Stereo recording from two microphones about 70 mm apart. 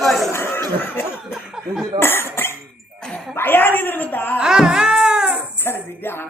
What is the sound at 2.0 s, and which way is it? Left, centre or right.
A woman's voice, left.